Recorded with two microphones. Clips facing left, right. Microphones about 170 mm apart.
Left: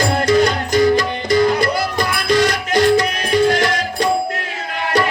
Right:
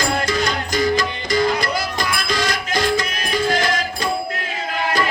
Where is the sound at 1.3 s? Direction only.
60° left (ahead or behind).